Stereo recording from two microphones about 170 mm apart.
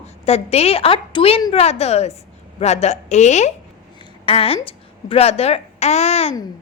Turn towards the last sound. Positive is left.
turn(degrees=40)  # may be behind; listen again after turning